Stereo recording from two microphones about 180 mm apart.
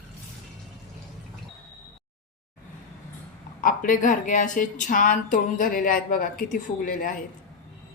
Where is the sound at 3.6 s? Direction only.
45° left (ahead or behind).